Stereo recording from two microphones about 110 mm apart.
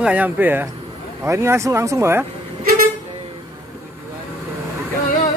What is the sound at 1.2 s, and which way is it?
Speech, 25° right (ahead or behind).